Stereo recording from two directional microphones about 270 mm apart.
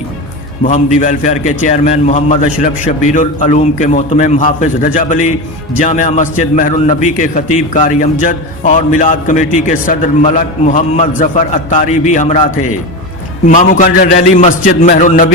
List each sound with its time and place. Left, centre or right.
0.6 s a man's voice: left